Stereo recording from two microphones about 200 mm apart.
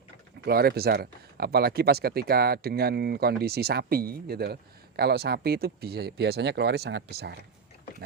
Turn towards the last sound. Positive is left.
turn(degrees=-55)  # may be behind; listen again after turning